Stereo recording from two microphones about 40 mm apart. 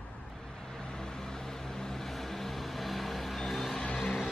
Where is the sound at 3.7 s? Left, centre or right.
Left.